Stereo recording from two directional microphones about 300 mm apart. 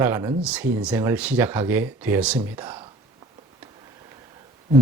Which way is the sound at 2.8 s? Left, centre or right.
Centre.